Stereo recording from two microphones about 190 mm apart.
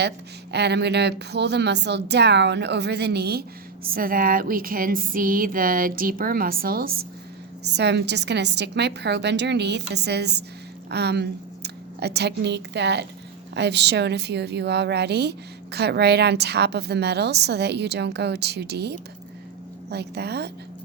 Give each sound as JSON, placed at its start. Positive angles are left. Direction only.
{"t": 0.5, "sound": "a woman's voice", "side_deg": -60}
{"t": 7.6, "sound": "a woman's voice", "side_deg": -60}